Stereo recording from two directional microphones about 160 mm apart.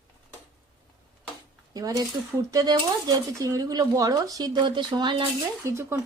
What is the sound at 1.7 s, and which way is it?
Speech, 20° right (ahead or behind).